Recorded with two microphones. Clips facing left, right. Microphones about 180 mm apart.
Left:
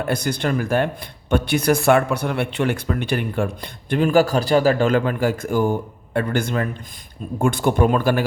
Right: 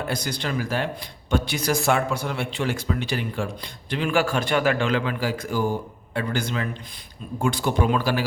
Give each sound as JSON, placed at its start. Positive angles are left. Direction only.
{"t": 0.1, "sound": "speech", "side_deg": 55}